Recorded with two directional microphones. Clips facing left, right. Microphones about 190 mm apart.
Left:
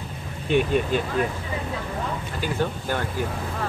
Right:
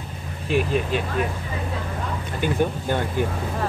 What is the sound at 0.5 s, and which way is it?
Speech, 5° right (ahead or behind).